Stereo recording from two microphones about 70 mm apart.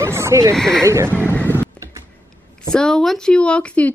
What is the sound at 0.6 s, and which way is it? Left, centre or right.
Speech, centre.